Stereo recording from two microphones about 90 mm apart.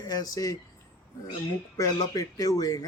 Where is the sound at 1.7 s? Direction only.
40° left (ahead or behind).